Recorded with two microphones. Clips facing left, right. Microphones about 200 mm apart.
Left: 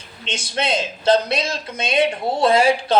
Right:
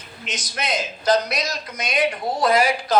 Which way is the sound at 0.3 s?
30° left (ahead or behind).